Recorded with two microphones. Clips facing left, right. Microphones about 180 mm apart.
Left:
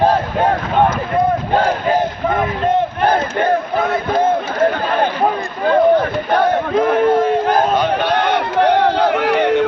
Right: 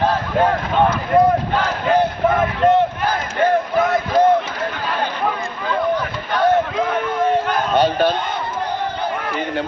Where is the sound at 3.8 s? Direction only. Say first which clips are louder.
Right 2 dB; 60° left (ahead or behind); by 7.6 s 35° left (ahead or behind).